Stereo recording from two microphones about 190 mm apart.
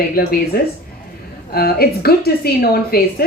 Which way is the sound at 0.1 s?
50° left (ahead or behind).